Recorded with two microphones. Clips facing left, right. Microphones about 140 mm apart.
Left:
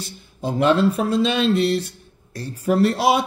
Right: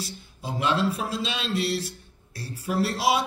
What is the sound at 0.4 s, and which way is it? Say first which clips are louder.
Speech: left 8 dB; 50° left (ahead or behind).